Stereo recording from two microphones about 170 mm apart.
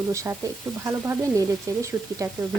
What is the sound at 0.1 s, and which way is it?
Speech, 15° right (ahead or behind).